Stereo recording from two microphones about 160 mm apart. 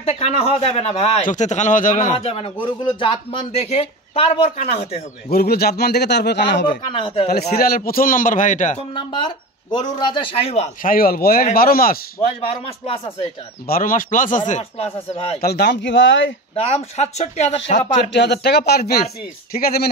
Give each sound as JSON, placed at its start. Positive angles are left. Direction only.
{"t": 0.0, "sound": "a man's voice", "side_deg": 40}
{"t": 1.2, "sound": "a man's voice", "side_deg": 50}
{"t": 5.3, "sound": "a man's voice", "side_deg": 70}
{"t": 6.9, "sound": "a man's voice", "side_deg": 35}
{"t": 7.5, "sound": "a man's voice", "side_deg": 70}
{"t": 8.9, "sound": "a man's voice", "side_deg": 30}
{"t": 10.8, "sound": "a man's voice", "side_deg": 60}
{"t": 12.2, "sound": "a man's voice", "side_deg": 40}
{"t": 13.7, "sound": "a man's voice", "side_deg": 60}
{"t": 14.5, "sound": "a man's voice", "side_deg": 40}
{"t": 15.4, "sound": "a man's voice", "side_deg": 85}
{"t": 16.5, "sound": "speech", "side_deg": 40}
{"t": 18.1, "sound": "a man's voice", "side_deg": 90}